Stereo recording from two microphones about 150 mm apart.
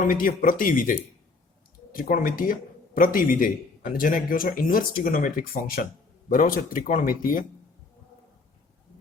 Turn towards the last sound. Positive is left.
turn(degrees=70)  # may be behind; listen again after turning